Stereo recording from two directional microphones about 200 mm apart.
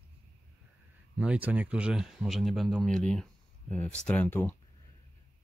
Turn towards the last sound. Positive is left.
turn(degrees=10)  # may be behind; listen again after turning